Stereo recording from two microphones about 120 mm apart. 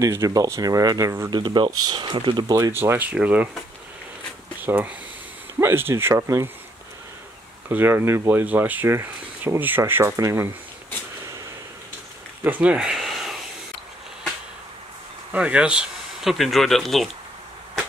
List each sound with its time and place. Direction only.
0.0 s speech: 25° right (ahead or behind)
1.3 s speech: 40° right (ahead or behind)
2.8 s speech: 15° right (ahead or behind)
4.6 s speech: 15° right (ahead or behind)
7.7 s speech: 20° right (ahead or behind)
12.4 s a sound: 10° right (ahead or behind)
15.3 s speech: 10° right (ahead or behind)